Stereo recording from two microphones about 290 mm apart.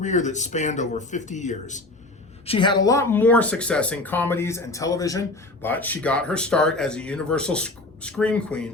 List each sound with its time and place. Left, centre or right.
0.0 s speech: left; by 8.7 s centre